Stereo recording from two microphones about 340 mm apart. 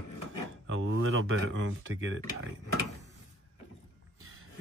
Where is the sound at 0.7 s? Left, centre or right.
Right.